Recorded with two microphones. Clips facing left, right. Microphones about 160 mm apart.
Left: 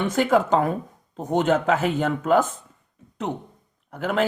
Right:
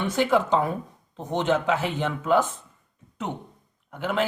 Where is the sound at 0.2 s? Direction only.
45° left (ahead or behind).